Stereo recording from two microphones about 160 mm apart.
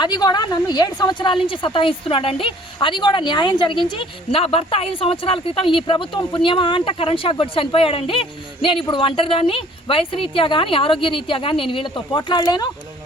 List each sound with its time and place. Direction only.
0.0 s a woman's voice: 25° left (ahead or behind)